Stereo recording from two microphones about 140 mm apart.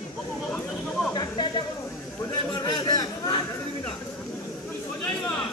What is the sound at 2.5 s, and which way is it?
Chatter, 30° left (ahead or behind).